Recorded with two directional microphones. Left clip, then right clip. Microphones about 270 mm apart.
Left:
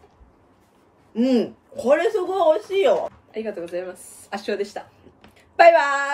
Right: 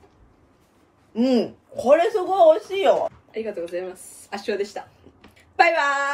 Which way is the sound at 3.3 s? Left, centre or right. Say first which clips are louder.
Even; centre.